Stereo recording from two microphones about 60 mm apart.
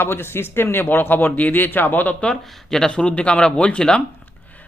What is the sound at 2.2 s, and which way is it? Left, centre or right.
Speech, centre.